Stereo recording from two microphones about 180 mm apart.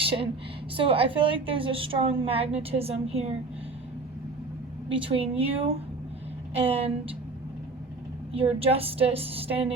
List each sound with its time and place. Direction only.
0.0 s a woman's voice: 30° right (ahead or behind)
4.9 s a woman's voice: 30° right (ahead or behind)
8.3 s a woman's voice: 30° right (ahead or behind)